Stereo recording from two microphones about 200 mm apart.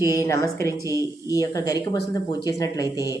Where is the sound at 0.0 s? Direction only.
15° left (ahead or behind).